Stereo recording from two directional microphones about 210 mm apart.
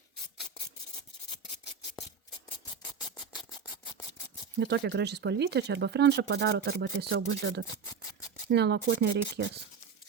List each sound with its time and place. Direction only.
4.6 s speech: 55° right (ahead or behind)